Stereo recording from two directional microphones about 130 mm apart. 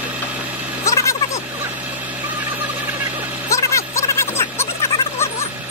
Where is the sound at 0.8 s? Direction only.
25° left (ahead or behind).